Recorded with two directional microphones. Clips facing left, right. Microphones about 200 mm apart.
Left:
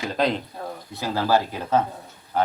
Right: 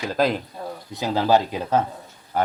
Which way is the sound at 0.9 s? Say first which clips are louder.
Right 3 dB; 20° right (ahead or behind).